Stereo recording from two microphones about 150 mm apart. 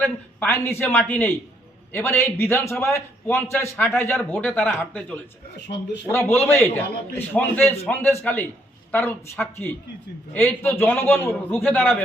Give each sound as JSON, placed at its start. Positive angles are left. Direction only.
{"t": 0.0, "sound": "a man's voice", "side_deg": 10}